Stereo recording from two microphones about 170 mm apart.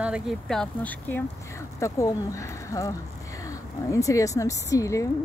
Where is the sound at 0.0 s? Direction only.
5° right (ahead or behind).